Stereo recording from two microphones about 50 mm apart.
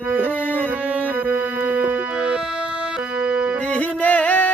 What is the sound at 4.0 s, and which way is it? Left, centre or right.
Music, left.